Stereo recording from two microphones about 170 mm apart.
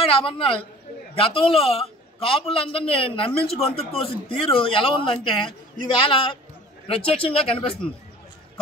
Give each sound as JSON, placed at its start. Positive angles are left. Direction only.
{"t": 0.0, "sound": "speech", "side_deg": 35}